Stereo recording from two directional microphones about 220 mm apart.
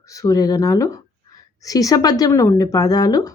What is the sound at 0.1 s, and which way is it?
Speech, 15° left (ahead or behind).